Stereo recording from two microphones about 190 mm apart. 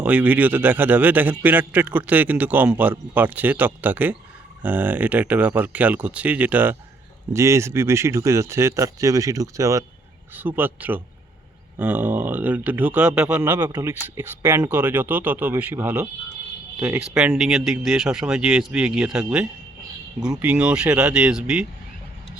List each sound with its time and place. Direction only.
0.0 s speech: 10° right (ahead or behind)